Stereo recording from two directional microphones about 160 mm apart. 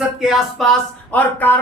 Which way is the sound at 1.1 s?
10° left (ahead or behind).